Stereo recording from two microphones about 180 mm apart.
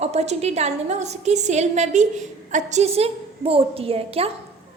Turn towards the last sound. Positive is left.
turn(degrees=-35)  # may be behind; listen again after turning